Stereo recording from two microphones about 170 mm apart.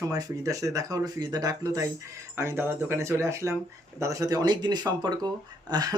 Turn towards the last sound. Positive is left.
turn(degrees=-25)  # may be behind; listen again after turning